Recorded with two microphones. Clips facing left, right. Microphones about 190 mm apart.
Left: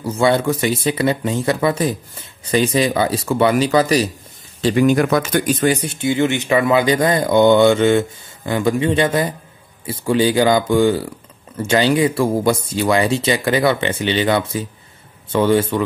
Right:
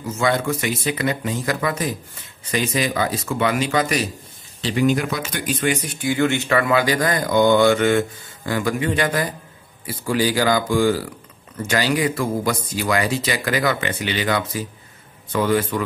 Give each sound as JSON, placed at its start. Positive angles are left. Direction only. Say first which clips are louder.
{"t": 0.0, "sound": "speech", "louder": "left 5 dB", "side_deg": 30}
{"t": 4.6, "sound": "speech", "louder": "left 5 dB", "side_deg": 50}